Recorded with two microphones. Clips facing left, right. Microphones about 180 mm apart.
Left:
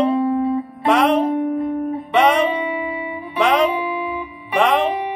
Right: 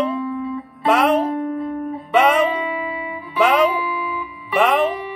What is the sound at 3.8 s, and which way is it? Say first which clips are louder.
Music: left 2 dB; 20° left (ahead or behind).